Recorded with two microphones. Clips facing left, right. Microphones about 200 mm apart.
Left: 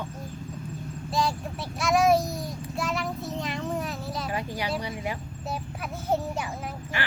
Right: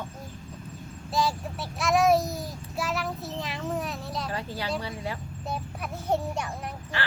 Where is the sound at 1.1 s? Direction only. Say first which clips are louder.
Even; centre (ahead or behind).